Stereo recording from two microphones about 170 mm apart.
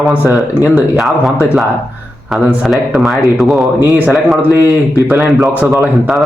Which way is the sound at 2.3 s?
10° right (ahead or behind).